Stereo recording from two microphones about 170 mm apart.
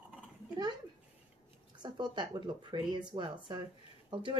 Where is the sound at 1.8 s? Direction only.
25° right (ahead or behind).